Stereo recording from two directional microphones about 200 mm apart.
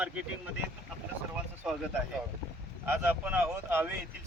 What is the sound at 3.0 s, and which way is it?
Speech, 10° right (ahead or behind).